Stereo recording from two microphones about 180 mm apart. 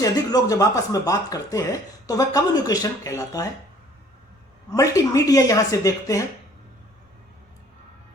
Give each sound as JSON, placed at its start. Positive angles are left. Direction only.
{"t": 0.0, "sound": "speech", "side_deg": 20}
{"t": 4.7, "sound": "speech", "side_deg": 20}